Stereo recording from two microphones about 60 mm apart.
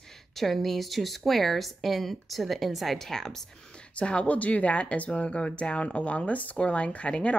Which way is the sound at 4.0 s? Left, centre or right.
Centre.